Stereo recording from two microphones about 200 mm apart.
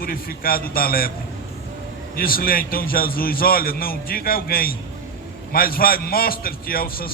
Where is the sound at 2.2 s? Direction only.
45° left (ahead or behind).